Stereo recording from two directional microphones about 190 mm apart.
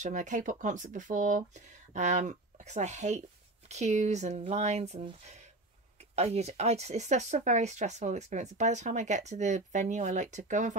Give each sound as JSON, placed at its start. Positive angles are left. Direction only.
{"t": 0.0, "sound": "speech", "side_deg": -40}